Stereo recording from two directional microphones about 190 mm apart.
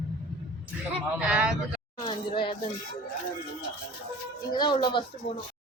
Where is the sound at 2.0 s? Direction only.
25° left (ahead or behind).